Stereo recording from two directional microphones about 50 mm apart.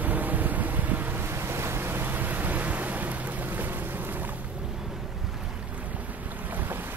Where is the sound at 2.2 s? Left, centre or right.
Right.